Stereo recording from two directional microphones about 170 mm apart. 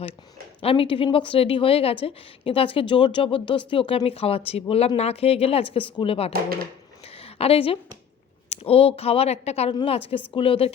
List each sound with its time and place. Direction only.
0.6 s a woman's voice: 35° left (ahead or behind)
6.3 s speech: 60° right (ahead or behind)
7.2 s a woman's voice: 35° left (ahead or behind)